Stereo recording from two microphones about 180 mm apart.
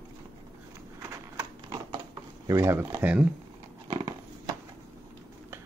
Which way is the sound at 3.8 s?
20° right (ahead or behind).